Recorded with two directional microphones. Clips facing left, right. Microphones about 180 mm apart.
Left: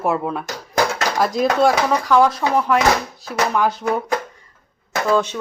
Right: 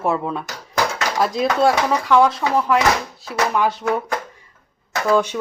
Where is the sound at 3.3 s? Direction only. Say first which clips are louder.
Even; centre (ahead or behind).